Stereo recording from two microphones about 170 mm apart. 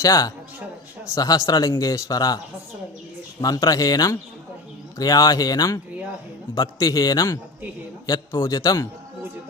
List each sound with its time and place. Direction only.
0.0 s a man's voice: 20° left (ahead or behind)
3.4 s a man's voice: 20° left (ahead or behind)